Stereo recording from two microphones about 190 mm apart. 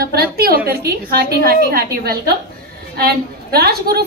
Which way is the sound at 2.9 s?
55° right (ahead or behind).